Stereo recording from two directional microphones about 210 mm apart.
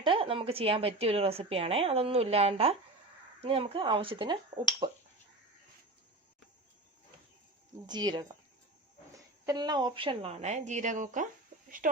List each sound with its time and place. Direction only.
0.0 s a woman's voice: 25° right (ahead or behind)
7.9 s a woman's voice: 20° right (ahead or behind); by 11.3 s 35° right (ahead or behind)